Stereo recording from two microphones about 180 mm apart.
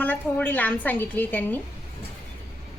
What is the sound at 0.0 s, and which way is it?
A woman's voice, 10° left (ahead or behind).